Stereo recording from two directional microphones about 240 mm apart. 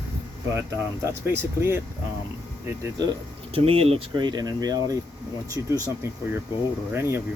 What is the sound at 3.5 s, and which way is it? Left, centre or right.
Speech, right.